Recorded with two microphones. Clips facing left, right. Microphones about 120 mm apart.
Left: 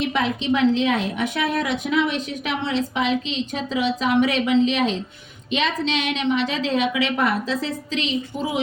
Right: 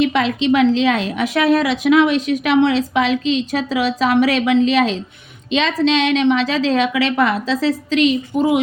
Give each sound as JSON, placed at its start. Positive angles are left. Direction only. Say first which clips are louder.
{"t": 0.0, "sound": "a woman's voice", "louder": "right 6 dB", "side_deg": -90}